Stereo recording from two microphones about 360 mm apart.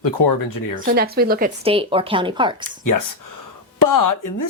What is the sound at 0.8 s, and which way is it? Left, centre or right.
Speech, right.